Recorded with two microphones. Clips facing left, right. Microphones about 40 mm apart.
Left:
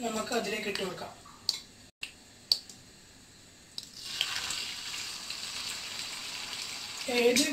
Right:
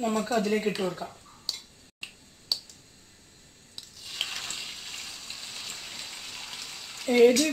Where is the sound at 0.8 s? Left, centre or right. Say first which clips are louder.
Right 6 dB; centre.